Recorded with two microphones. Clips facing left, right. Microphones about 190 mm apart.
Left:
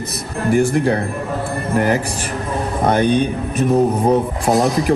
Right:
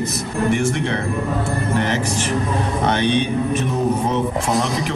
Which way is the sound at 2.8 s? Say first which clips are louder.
Left 5 dB; 35° left (ahead or behind).